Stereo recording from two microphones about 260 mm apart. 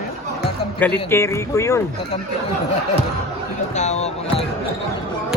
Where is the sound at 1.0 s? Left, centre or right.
Centre.